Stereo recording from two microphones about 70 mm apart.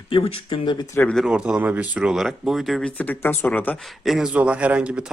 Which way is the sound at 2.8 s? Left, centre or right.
Left.